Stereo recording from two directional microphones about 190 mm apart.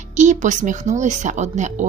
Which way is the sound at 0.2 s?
40° right (ahead or behind).